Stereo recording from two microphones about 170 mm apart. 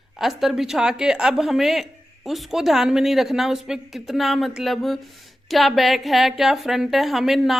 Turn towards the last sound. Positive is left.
turn(degrees=0)  # may be behind; listen again after turning